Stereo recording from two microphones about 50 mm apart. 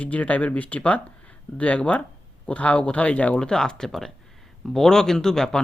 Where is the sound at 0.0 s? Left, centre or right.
Left.